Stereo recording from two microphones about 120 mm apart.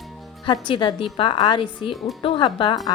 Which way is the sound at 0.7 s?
45° left (ahead or behind).